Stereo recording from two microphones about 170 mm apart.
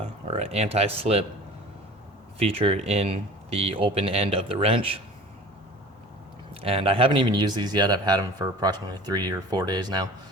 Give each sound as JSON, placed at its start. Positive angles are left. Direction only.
{"t": 0.0, "sound": "speech", "side_deg": -35}
{"t": 2.4, "sound": "speech", "side_deg": -35}
{"t": 6.6, "sound": "speech", "side_deg": -35}